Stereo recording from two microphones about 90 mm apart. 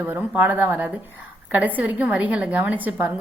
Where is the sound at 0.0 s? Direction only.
20° right (ahead or behind).